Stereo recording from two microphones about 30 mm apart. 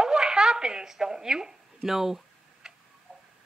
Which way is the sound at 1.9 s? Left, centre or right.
Centre.